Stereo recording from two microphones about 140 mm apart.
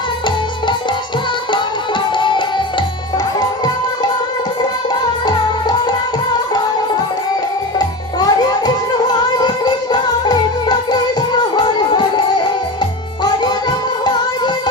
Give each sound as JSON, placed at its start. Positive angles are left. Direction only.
{"t": 2.1, "sound": "music", "side_deg": 35}
{"t": 7.8, "sound": "music", "side_deg": 30}
{"t": 13.2, "sound": "music", "side_deg": 30}